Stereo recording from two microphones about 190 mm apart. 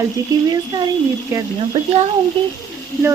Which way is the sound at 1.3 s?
15° right (ahead or behind).